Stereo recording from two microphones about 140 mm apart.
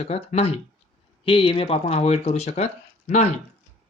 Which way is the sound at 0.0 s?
50° left (ahead or behind).